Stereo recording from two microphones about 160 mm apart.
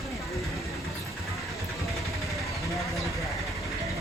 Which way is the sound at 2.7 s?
Centre (ahead or behind).